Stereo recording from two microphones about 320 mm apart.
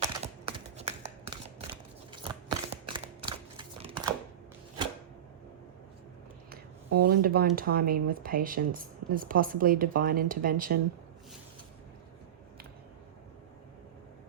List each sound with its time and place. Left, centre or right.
0.0 s computer keyboard: centre
2.2 s a sound: centre
3.6 s crumpling: centre
7.0 s a woman's voice: right